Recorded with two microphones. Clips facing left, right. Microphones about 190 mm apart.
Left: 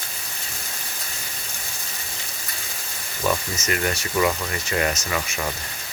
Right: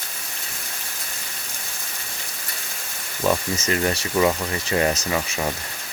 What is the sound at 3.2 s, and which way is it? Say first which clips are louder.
Speech: right 3 dB; 30° right (ahead or behind).